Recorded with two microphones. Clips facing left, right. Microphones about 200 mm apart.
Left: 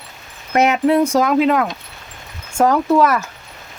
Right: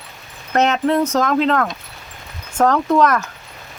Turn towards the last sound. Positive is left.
turn(degrees=5)  # may be behind; listen again after turning